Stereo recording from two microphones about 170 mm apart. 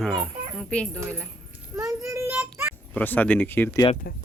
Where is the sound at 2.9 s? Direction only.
10° left (ahead or behind).